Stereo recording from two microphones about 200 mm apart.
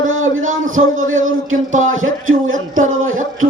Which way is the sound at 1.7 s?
40° right (ahead or behind).